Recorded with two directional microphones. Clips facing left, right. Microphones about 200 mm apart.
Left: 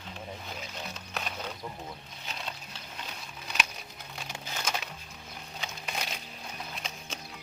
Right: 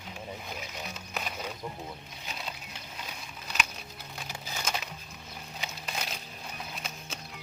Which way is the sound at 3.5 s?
5° right (ahead or behind).